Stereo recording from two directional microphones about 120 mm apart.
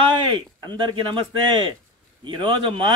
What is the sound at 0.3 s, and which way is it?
Speech, 40° right (ahead or behind).